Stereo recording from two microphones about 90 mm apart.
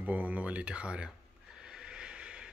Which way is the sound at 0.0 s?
20° right (ahead or behind).